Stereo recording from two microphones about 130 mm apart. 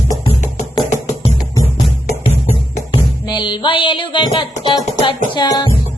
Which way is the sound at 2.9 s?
35° left (ahead or behind).